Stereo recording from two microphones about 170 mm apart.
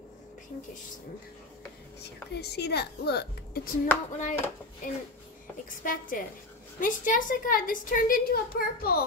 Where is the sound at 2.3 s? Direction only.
75° left (ahead or behind).